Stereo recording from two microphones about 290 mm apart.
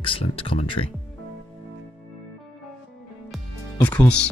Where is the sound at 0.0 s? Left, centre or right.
Centre.